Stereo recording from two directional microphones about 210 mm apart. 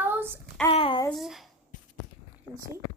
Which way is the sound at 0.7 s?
25° left (ahead or behind).